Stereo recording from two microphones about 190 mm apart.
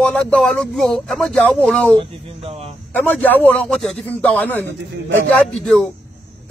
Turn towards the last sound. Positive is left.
turn(degrees=5)  # may be behind; listen again after turning